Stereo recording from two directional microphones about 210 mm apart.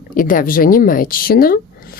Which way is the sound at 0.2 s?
40° left (ahead or behind).